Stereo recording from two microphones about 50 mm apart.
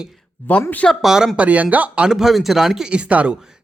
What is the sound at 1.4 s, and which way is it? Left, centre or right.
Speech, right.